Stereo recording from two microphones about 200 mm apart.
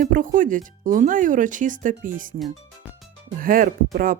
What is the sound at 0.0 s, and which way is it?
Speech, 40° right (ahead or behind).